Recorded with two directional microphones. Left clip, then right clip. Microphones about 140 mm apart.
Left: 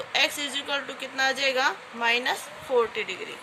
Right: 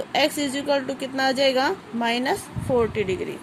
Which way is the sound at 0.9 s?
45° right (ahead or behind).